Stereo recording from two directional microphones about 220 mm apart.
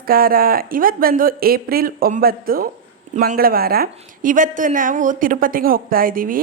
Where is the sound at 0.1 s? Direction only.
40° right (ahead or behind).